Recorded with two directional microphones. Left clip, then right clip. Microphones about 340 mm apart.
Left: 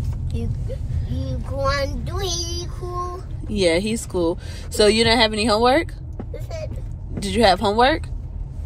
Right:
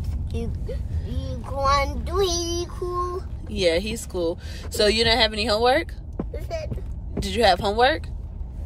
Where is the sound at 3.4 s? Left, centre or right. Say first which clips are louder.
Left 3 dB; centre.